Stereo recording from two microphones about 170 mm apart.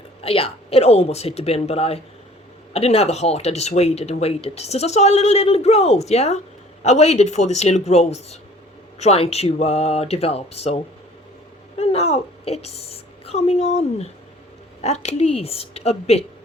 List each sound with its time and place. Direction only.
0.2 s speech: 35° left (ahead or behind)
11.8 s a woman's voice: 35° left (ahead or behind)